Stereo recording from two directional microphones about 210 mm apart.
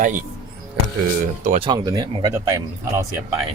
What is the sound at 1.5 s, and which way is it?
Speech, 25° right (ahead or behind).